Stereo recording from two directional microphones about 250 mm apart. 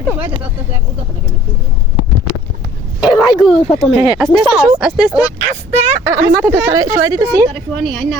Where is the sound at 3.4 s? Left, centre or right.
Centre.